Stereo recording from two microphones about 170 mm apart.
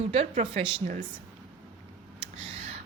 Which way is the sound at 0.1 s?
35° right (ahead or behind).